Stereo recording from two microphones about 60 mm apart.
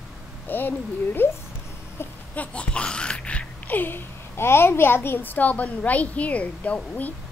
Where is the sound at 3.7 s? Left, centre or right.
Left.